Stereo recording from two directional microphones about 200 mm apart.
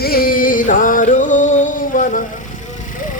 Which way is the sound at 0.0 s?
45° left (ahead or behind).